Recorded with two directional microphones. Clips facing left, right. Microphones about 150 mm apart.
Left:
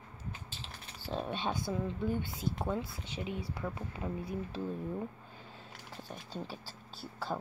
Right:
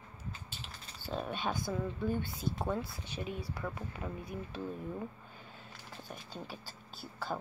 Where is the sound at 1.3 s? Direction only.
25° left (ahead or behind).